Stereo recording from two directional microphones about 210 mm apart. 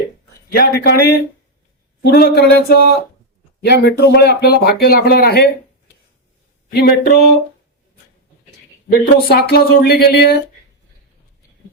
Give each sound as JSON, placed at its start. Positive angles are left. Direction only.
{"t": 0.5, "sound": "speech", "side_deg": 50}
{"t": 6.7, "sound": "speech", "side_deg": 50}
{"t": 8.9, "sound": "speech", "side_deg": 45}